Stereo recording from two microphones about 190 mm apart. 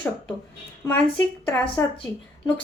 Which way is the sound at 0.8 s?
10° left (ahead or behind).